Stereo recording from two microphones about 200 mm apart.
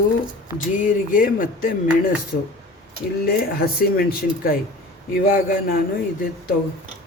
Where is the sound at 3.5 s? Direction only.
50° left (ahead or behind).